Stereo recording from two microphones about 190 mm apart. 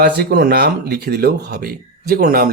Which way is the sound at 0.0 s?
55° right (ahead or behind).